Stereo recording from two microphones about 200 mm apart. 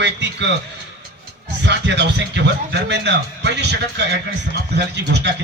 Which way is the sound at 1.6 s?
60° right (ahead or behind).